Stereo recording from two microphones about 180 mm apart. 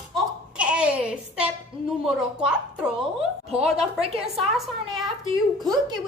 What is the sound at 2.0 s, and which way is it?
A woman's voice, 5° right (ahead or behind).